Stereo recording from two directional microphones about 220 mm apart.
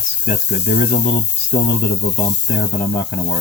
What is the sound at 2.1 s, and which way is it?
Speech, 50° left (ahead or behind).